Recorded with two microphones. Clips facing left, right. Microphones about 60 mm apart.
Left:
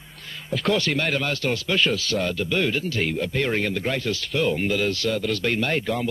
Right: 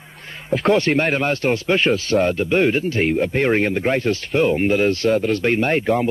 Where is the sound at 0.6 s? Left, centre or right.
Right.